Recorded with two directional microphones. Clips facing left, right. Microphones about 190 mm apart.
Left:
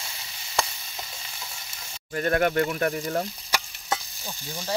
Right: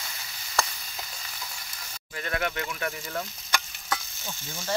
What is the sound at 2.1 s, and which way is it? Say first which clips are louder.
Speech: left 9 dB; 45° left (ahead or behind).